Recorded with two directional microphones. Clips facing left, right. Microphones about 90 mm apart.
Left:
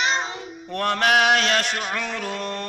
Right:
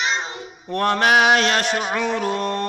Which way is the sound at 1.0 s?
10° right (ahead or behind).